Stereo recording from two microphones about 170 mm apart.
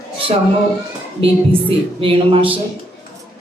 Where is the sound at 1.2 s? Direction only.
30° right (ahead or behind).